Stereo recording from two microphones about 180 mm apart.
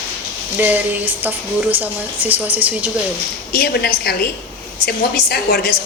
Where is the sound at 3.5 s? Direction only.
60° left (ahead or behind).